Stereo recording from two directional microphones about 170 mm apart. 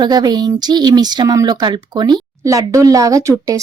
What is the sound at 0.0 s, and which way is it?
Speech, 25° right (ahead or behind).